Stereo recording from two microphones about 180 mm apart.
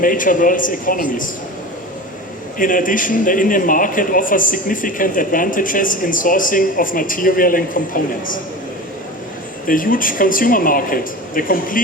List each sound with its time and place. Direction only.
0.0 s a man's voice: 50° left (ahead or behind)
2.6 s a man's voice: 50° left (ahead or behind)
9.6 s a man's voice: 50° left (ahead or behind)